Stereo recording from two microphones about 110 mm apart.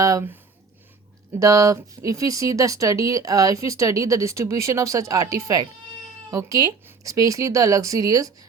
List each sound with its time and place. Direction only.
0.0 s speech: 30° right (ahead or behind)
1.4 s speech: 30° right (ahead or behind)